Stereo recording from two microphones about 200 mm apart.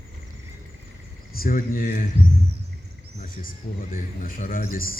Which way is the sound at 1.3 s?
45° left (ahead or behind).